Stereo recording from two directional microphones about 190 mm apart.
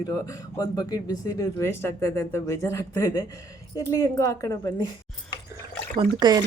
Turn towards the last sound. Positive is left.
turn(degrees=-20)  # may be behind; listen again after turning